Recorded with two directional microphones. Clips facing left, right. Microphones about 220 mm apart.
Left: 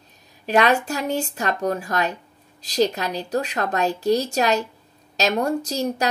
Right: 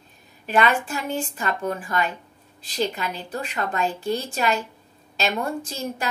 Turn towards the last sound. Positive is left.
turn(degrees=40)  # may be behind; listen again after turning